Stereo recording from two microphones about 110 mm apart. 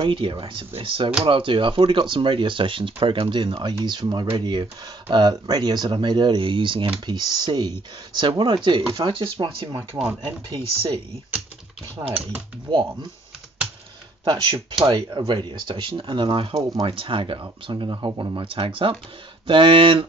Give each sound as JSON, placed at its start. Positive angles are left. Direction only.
{"t": 0.0, "sound": "speech", "side_deg": -50}
{"t": 7.1, "sound": "speech", "side_deg": -35}
{"t": 12.7, "sound": "speech", "side_deg": -45}
{"t": 14.3, "sound": "speech", "side_deg": -50}